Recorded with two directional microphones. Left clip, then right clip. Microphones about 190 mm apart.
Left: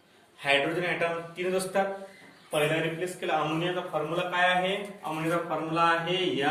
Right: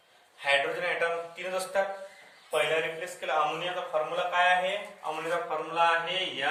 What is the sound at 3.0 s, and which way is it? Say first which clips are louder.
Speech: even; 5° left (ahead or behind).